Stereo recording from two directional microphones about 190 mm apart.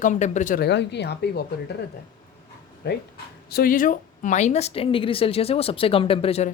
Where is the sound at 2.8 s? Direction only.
65° left (ahead or behind).